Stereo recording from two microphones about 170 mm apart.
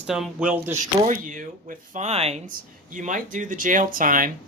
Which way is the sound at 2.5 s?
50° right (ahead or behind).